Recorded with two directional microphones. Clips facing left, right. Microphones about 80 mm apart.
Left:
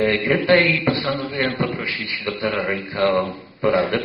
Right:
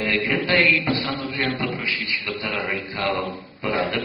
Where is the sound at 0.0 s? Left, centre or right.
Left.